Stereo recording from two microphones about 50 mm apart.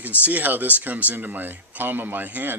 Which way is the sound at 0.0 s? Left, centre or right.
Right.